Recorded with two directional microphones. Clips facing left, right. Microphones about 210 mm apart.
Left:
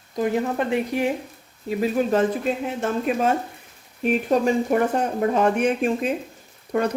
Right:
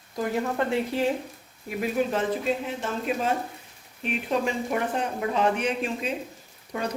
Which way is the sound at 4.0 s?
45° left (ahead or behind).